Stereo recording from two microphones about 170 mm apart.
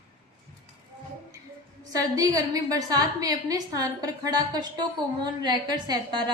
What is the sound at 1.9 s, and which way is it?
A woman's voice, 20° right (ahead or behind).